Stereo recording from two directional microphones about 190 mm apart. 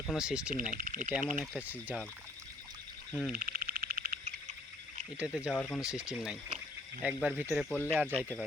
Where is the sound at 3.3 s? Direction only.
50° right (ahead or behind).